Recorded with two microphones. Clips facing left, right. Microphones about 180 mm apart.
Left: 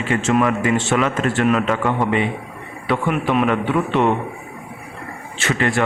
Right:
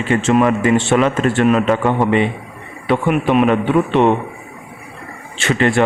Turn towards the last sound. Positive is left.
turn(degrees=-25)  # may be behind; listen again after turning